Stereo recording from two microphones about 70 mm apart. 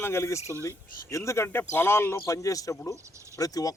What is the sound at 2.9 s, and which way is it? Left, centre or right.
Speech, right.